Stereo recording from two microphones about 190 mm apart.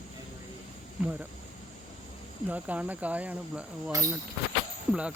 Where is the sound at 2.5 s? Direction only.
10° right (ahead or behind).